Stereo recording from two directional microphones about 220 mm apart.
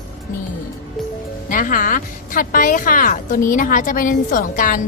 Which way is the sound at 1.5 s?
35° left (ahead or behind).